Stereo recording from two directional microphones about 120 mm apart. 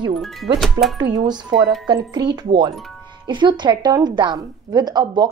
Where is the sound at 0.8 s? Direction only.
30° right (ahead or behind).